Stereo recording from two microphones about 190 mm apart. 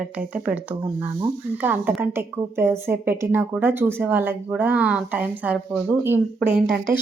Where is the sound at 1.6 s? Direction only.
10° right (ahead or behind).